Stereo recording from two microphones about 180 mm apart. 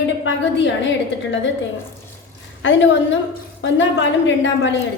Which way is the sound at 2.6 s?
90° left.